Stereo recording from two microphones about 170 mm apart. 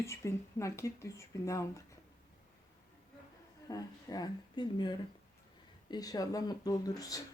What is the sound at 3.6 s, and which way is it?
A woman's voice, 20° left (ahead or behind).